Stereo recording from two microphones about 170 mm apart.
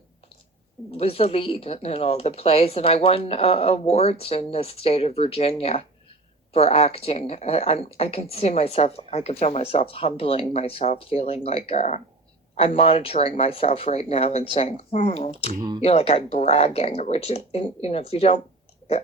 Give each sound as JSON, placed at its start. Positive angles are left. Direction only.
{"t": 0.9, "sound": "speech", "side_deg": 35}